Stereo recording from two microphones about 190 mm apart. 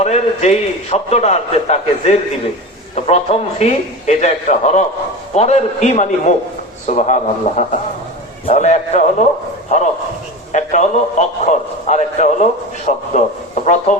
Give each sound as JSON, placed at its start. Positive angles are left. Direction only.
{"t": 0.0, "sound": "a man's voice", "side_deg": 35}